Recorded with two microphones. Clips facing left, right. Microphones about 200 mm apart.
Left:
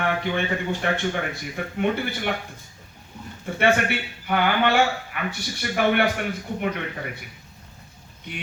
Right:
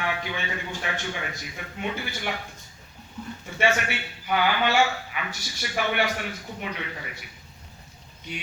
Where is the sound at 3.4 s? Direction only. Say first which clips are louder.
Left 4 dB; 55° left (ahead or behind).